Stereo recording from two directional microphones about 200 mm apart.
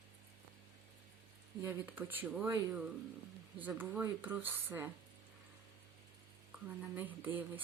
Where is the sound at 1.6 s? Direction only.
10° right (ahead or behind).